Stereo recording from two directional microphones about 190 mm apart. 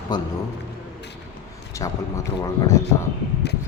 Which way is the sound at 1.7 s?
15° left (ahead or behind).